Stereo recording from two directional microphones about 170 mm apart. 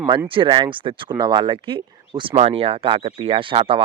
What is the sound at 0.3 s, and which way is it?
Speech, 30° right (ahead or behind).